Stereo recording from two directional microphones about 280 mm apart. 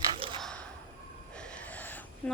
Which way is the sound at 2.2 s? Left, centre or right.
Centre.